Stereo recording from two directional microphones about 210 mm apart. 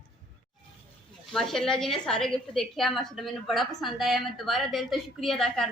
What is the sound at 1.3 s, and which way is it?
A woman's voice, centre (ahead or behind).